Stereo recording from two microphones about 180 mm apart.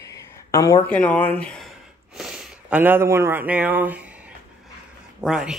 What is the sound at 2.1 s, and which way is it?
Speech, 5° right (ahead or behind).